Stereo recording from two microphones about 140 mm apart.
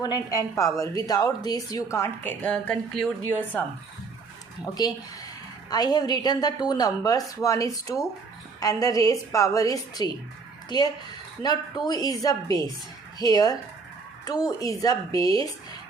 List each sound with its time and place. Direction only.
0.0 s a woman's voice: 25° left (ahead or behind)
2.4 s a woman's voice: 10° left (ahead or behind)
4.8 s a woman's voice: 30° left (ahead or behind)